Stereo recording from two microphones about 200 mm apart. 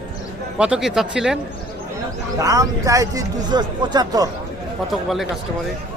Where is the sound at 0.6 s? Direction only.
5° right (ahead or behind).